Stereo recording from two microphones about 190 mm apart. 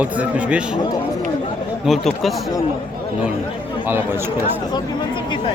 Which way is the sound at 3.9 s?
10° right (ahead or behind).